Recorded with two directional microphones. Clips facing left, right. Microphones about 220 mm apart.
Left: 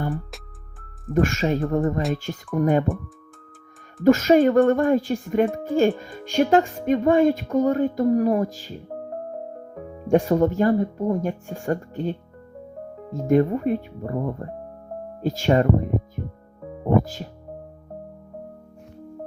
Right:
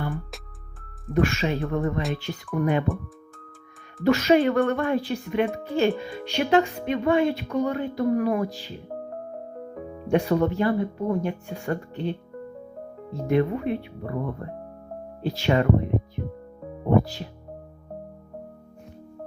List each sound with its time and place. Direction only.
1.1 s speech: 45° left (ahead or behind)
4.0 s speech: 45° left (ahead or behind)
10.1 s speech: 45° left (ahead or behind)